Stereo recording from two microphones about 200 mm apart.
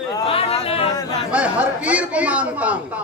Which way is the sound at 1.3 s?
5° right (ahead or behind).